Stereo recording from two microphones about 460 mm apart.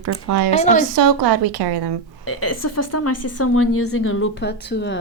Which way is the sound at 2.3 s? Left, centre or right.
Left.